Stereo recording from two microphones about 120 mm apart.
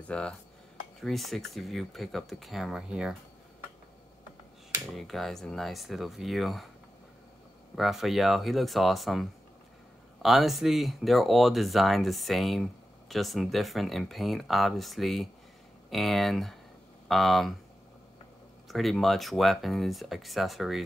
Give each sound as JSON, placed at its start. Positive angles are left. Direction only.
{"t": 0.1, "sound": "cutlery", "side_deg": 10}
{"t": 1.0, "sound": "speech", "side_deg": 0}
{"t": 4.9, "sound": "speech", "side_deg": 0}
{"t": 7.7, "sound": "speech", "side_deg": 0}
{"t": 18.7, "sound": "speech", "side_deg": 0}